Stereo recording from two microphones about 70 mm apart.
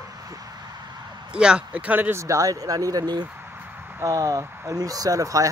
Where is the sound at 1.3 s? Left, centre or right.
Centre.